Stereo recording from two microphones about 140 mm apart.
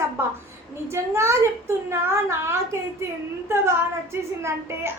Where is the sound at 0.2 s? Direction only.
20° right (ahead or behind).